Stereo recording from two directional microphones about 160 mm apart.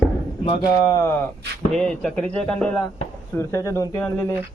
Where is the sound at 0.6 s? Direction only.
20° left (ahead or behind).